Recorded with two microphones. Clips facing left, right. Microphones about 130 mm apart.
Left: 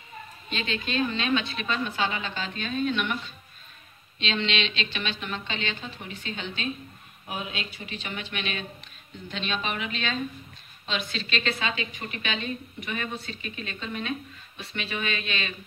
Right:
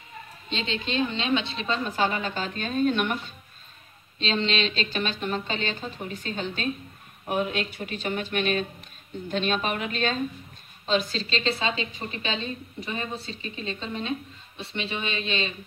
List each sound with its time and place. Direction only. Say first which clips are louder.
0.5 s a woman's voice: right 1 dB; 25° right (ahead or behind)
1.9 s a woman's voice: right 3 dB; 45° right (ahead or behind); by 15.5 s 25° right (ahead or behind)